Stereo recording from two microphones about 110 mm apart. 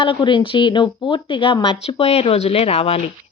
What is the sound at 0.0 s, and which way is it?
Speech, 50° left (ahead or behind).